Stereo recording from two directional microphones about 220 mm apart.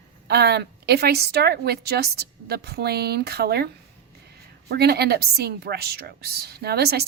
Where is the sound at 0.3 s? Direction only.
45° right (ahead or behind).